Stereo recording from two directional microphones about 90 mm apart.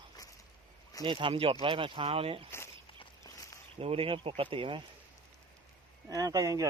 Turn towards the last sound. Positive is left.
turn(degrees=-35)  # may be behind; listen again after turning